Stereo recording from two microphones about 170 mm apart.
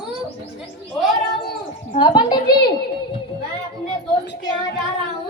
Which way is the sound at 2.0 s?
25° left (ahead or behind).